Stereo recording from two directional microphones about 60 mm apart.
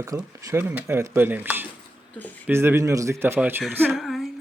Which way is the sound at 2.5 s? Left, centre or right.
Right.